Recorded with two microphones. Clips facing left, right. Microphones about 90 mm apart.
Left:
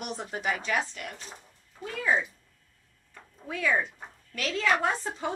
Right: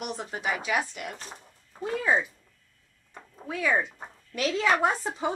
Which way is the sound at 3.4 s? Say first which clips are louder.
Right 1 dB; 10° right (ahead or behind).